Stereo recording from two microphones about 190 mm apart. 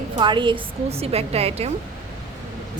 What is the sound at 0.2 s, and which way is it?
A woman's voice, 25° right (ahead or behind).